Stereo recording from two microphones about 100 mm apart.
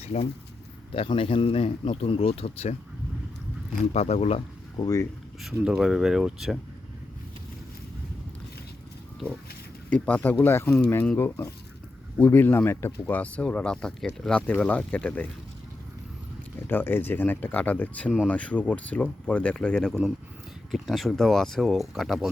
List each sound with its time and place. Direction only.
0.0 s speech: 90° left
0.9 s speech: 65° left (ahead or behind); by 2.7 s 85° left
3.9 s speech: 90° left
4.8 s speech: 30° left (ahead or behind)
5.4 s speech: centre (ahead or behind)
9.9 s speech: 15° left (ahead or behind)
16.6 s speech: 20° left (ahead or behind); by 22.3 s centre (ahead or behind)